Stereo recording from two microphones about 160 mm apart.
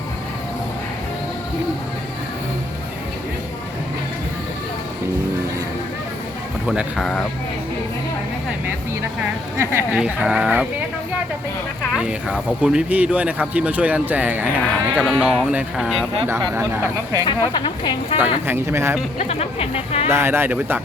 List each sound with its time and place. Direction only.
6.7 s speech: centre (ahead or behind)
9.9 s speech: 5° right (ahead or behind)
12.5 s speech: 5° right (ahead or behind)
16.6 s speech: 20° right (ahead or behind)
17.5 s speech: 30° left (ahead or behind)
18.4 s speech: 15° right (ahead or behind)
19.2 s speech: 40° left (ahead or behind)
20.1 s speech: 15° right (ahead or behind)